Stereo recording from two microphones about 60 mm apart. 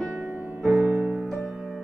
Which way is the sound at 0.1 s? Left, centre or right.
Right.